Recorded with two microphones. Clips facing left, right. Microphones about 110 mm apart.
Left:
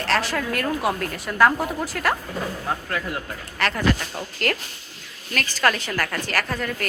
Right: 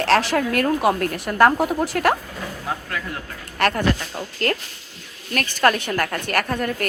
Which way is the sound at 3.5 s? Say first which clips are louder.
Right 5 dB; 50° right (ahead or behind).